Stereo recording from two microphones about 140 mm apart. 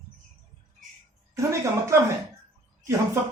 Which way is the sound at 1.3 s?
20° right (ahead or behind).